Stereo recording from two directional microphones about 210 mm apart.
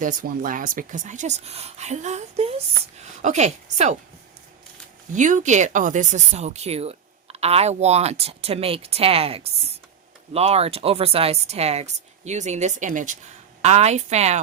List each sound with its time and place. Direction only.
0.0 s a woman's voice: 40° right (ahead or behind)
5.1 s speech: 35° right (ahead or behind)